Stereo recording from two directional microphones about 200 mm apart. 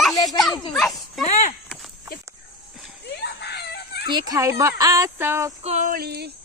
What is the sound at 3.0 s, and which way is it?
Screaming, 55° left (ahead or behind).